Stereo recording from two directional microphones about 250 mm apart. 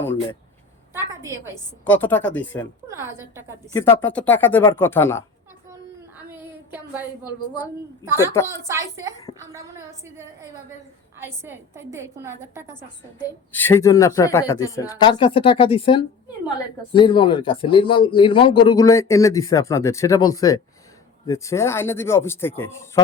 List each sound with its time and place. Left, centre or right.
0.0 s a man's voice: centre
0.9 s a woman's voice: centre
1.8 s a man's voice: centre
2.9 s a woman's voice: centre
3.7 s a man's voice: centre
6.3 s child singing: centre
7.5 s a woman's voice: centre
12.7 s a man's voice: centre